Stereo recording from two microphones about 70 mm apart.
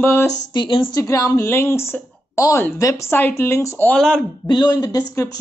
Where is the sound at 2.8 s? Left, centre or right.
Left.